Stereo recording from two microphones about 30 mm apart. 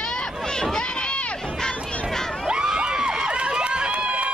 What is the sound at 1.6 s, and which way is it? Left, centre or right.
Crowd, left.